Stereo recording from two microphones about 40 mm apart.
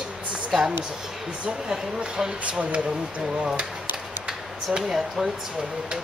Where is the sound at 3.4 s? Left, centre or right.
Centre.